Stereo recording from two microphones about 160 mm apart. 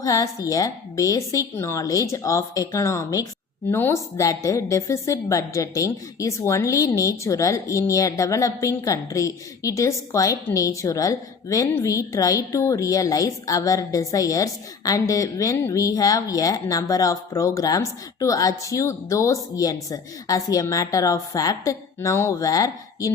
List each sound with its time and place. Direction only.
0.0 s a woman's voice: 20° left (ahead or behind)